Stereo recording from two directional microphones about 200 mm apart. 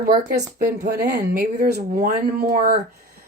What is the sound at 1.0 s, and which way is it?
Speech, 50° right (ahead or behind).